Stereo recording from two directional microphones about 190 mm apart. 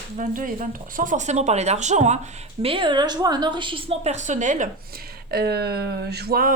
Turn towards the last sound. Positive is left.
turn(degrees=-50)  # may be behind; listen again after turning